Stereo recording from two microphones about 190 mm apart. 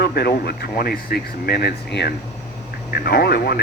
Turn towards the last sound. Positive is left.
turn(degrees=55)  # may be behind; listen again after turning